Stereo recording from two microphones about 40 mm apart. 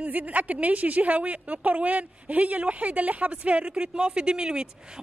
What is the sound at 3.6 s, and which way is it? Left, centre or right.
Speech, right.